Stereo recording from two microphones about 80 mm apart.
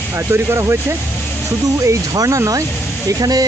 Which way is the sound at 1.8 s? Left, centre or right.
Right.